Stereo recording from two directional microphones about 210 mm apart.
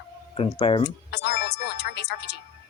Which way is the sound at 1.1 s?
55° left (ahead or behind).